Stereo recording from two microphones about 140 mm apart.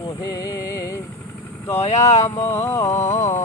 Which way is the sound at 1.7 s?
50° left (ahead or behind).